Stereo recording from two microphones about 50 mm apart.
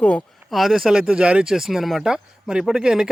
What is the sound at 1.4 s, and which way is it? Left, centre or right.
Speech, centre.